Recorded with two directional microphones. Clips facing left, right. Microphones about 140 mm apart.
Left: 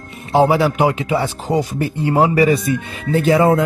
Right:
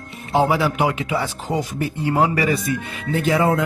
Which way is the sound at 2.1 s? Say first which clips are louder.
Left 6 dB; 25° left (ahead or behind).